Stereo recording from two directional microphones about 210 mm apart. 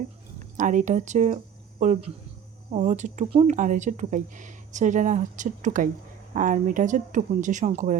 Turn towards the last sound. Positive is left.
turn(degrees=-35)  # may be behind; listen again after turning